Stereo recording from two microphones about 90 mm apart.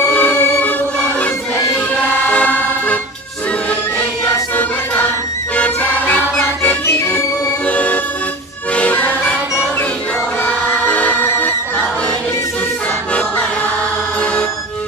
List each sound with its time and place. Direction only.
0.1 s choir: 20° left (ahead or behind)
2.2 s vehicle: 15° left (ahead or behind)
5.6 s music: 20° left (ahead or behind)
7.6 s music: 15° left (ahead or behind)
10.4 s music: 15° left (ahead or behind)